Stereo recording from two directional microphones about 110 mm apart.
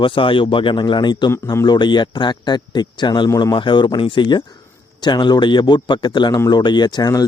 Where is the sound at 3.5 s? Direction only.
45° left (ahead or behind).